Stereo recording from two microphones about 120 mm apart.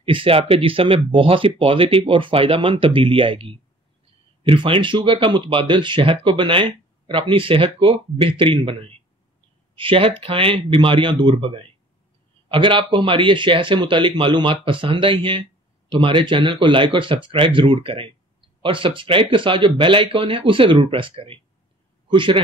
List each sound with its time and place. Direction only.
0.0 s speech: 50° right (ahead or behind)